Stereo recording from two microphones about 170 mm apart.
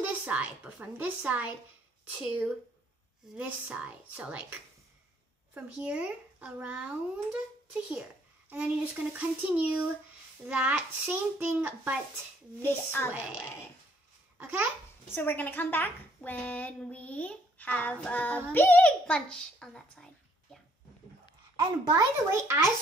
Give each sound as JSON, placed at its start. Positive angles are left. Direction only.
{"t": 0.0, "sound": "a child's voice", "side_deg": -10}
{"t": 8.5, "sound": "a child's voice", "side_deg": -10}
{"t": 12.6, "sound": "a woman's voice", "side_deg": 15}
{"t": 13.1, "sound": "a child's voice", "side_deg": -10}
{"t": 14.4, "sound": "a child's voice", "side_deg": -10}
{"t": 15.0, "sound": "a woman's voice", "side_deg": 10}
{"t": 21.5, "sound": "speech", "side_deg": -25}